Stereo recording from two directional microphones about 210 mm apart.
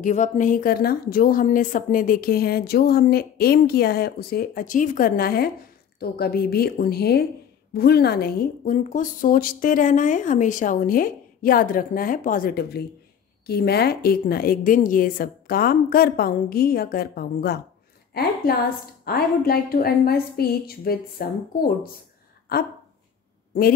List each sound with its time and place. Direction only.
0.0 s a woman's voice: 35° left (ahead or behind)